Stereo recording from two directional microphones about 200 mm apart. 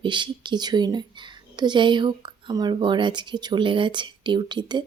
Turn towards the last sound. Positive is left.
turn(degrees=-20)  # may be behind; listen again after turning